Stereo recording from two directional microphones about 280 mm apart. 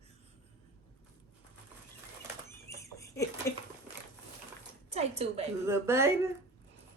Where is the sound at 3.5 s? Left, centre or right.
Centre.